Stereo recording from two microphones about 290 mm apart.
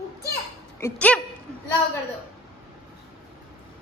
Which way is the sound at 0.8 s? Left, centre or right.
Centre.